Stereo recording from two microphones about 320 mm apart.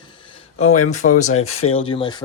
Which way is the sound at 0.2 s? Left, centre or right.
Centre.